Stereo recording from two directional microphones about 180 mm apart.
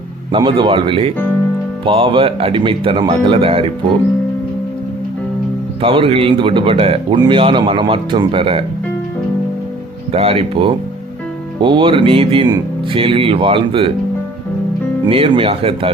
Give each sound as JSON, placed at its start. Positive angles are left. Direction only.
{"t": 0.3, "sound": "speech", "side_deg": -30}
{"t": 5.8, "sound": "speech", "side_deg": -30}
{"t": 10.1, "sound": "speech", "side_deg": -35}
{"t": 15.0, "sound": "speech", "side_deg": -30}